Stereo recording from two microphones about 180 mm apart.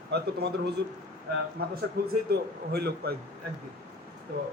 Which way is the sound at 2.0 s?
60° right (ahead or behind).